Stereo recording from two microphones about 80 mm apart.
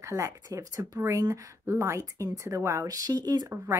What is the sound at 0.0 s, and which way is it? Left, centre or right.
Speech, right.